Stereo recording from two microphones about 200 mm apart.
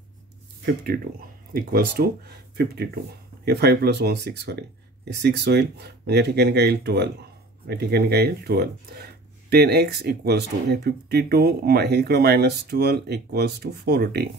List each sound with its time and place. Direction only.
1.5 s speech: 50° right (ahead or behind)